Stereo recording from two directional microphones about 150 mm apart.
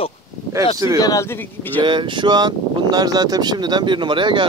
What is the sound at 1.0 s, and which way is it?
Speech, 20° left (ahead or behind).